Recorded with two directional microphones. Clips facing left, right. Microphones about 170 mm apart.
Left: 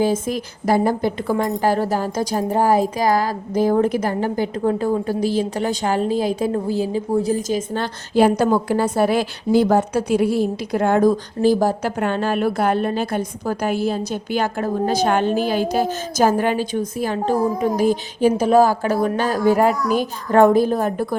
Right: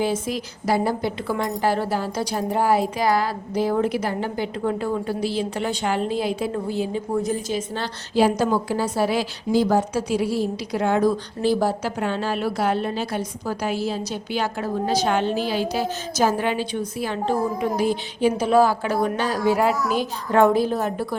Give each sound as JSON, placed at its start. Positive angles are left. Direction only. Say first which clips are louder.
{"t": 0.0, "sound": "a woman's voice", "louder": "left 4 dB", "side_deg": 50}